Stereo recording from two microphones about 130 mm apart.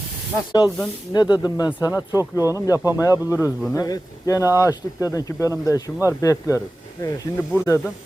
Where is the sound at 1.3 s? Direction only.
30° left (ahead or behind).